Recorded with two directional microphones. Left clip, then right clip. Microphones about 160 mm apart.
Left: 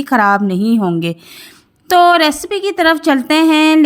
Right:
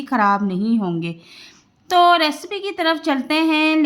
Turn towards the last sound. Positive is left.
turn(degrees=45)  # may be behind; listen again after turning